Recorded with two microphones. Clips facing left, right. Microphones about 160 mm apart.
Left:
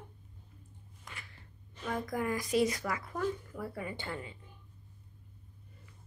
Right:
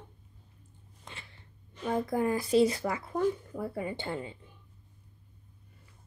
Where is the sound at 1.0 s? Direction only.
25° right (ahead or behind).